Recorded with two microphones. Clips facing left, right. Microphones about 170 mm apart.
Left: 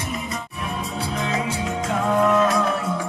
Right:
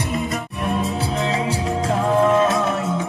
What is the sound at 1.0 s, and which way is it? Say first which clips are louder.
Music: right 3 dB; 30° right (ahead or behind).